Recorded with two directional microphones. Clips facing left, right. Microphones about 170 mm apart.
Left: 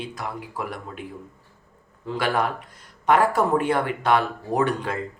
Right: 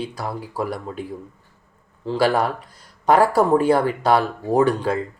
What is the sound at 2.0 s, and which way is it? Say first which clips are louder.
Speech: right 5 dB; 35° right (ahead or behind).